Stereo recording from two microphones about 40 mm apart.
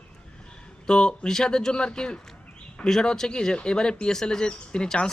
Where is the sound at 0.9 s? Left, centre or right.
Left.